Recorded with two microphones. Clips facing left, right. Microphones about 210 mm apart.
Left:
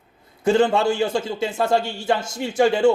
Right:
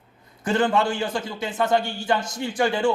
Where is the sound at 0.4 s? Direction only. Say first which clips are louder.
Left 4 dB; 25° left (ahead or behind).